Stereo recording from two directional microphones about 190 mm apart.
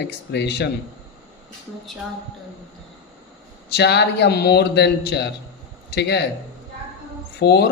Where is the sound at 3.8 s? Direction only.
60° left (ahead or behind).